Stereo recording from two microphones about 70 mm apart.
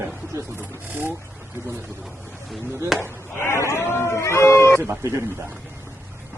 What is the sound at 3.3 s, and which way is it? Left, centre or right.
Speech, left.